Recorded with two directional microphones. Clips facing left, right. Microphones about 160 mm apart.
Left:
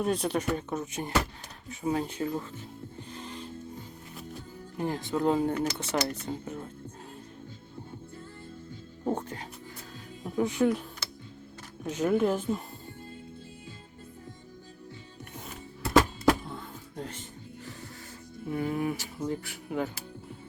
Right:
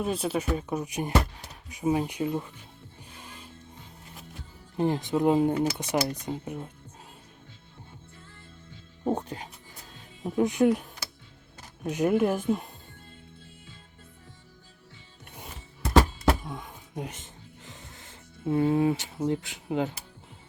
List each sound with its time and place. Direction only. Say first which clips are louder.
0.0 s speech: even; 5° right (ahead or behind)
3.1 s music: left 6 dB; 10° right (ahead or behind)
4.8 s speech: right 4 dB; 20° right (ahead or behind)
9.0 s music: right 2 dB; 15° right (ahead or behind)
10.2 s speech: right 3 dB; 20° right (ahead or behind)
16.5 s music: right 1 dB; 15° right (ahead or behind)
18.4 s speech: right 7 dB; 25° right (ahead or behind)